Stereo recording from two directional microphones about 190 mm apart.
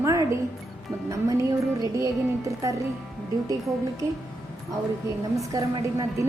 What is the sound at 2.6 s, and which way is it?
Speech, 15° right (ahead or behind).